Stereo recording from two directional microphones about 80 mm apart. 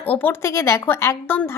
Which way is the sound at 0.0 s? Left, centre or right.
Left.